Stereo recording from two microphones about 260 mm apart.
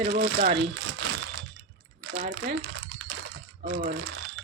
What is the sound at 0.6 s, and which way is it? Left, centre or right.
Crumpling, right.